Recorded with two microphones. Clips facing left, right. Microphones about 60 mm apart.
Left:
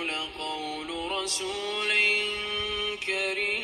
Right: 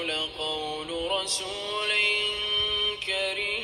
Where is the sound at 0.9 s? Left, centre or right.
Left.